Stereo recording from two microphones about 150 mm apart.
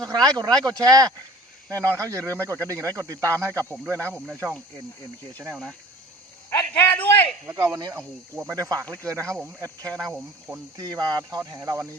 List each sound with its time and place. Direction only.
0.0 s speech: 25° right (ahead or behind)
6.9 s a man's voice: 10° left (ahead or behind)
7.4 s speech: 15° right (ahead or behind)
10.8 s speech: 25° right (ahead or behind)